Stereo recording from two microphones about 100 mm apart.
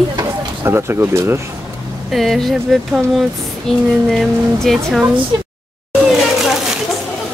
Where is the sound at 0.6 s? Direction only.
25° right (ahead or behind).